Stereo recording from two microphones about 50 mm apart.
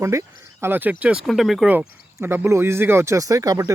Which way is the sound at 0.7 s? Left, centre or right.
Right.